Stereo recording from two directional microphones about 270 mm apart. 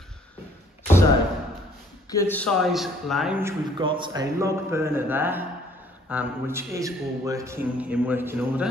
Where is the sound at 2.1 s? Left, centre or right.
Centre.